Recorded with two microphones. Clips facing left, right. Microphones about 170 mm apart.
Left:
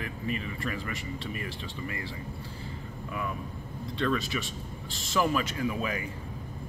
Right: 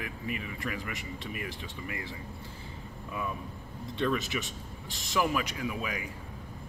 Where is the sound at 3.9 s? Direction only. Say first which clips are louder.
Left 1 dB; 15° right (ahead or behind).